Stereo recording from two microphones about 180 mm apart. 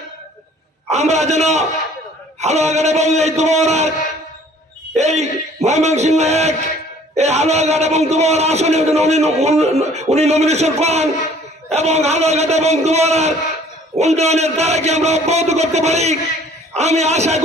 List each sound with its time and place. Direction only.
0.8 s a man's voice: 40° right (ahead or behind)
4.9 s a man's voice: 40° right (ahead or behind)